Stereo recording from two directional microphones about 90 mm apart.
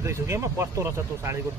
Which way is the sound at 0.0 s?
30° right (ahead or behind).